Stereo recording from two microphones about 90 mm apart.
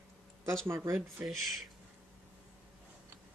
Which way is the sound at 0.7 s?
30° right (ahead or behind).